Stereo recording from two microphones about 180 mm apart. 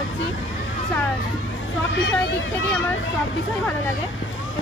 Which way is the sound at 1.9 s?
75° left (ahead or behind).